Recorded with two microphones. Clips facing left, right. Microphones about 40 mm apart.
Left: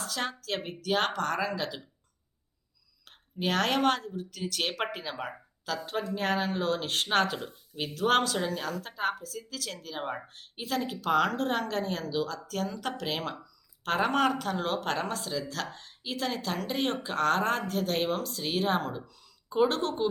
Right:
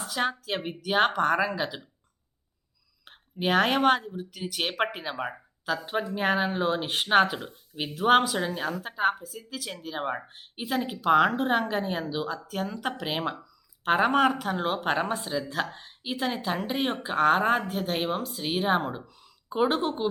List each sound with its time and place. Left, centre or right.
0.0 s speech: centre
3.0 s a woman's voice: centre
7.3 s speech: centre
7.8 s a woman's voice: centre